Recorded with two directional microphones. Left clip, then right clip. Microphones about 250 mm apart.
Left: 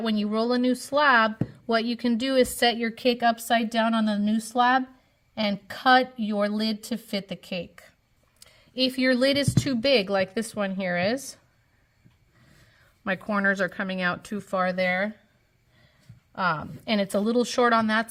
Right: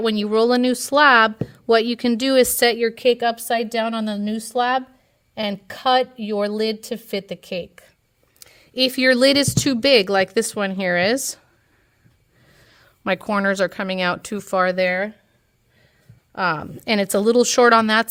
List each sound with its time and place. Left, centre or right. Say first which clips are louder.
0.0 s speech: right 9 dB; right
12.7 s speech: right 7 dB; right
16.3 s speech: right 4 dB; right